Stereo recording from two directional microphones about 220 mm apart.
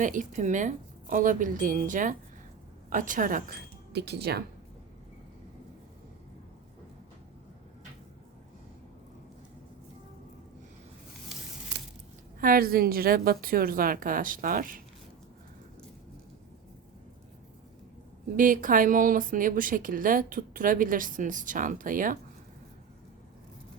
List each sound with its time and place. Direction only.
0.0 s a woman's voice: 35° right (ahead or behind)
3.9 s speech: 50° right (ahead or behind)
12.4 s a woman's voice: 40° right (ahead or behind)
18.3 s a woman's voice: 40° right (ahead or behind)